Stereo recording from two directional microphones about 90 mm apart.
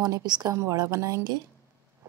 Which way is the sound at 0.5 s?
35° right (ahead or behind).